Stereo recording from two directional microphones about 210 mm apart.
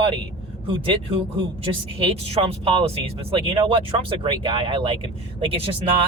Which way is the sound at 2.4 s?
25° right (ahead or behind).